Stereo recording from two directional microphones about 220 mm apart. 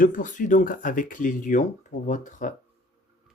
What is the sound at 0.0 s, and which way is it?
A man's voice, 35° left (ahead or behind).